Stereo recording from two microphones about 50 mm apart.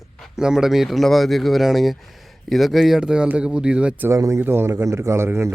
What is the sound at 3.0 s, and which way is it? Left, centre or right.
Speech, centre.